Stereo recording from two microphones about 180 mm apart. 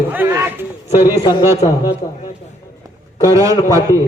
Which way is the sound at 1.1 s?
25° left (ahead or behind).